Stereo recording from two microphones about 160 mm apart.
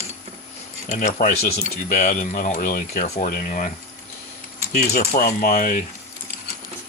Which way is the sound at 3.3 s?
60° left (ahead or behind).